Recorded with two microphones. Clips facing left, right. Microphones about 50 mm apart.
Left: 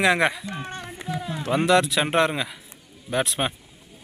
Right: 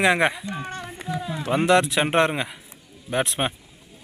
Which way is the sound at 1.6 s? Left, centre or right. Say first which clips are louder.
Right 1 dB; right.